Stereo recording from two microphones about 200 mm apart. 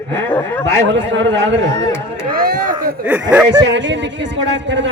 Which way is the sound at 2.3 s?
45° right (ahead or behind).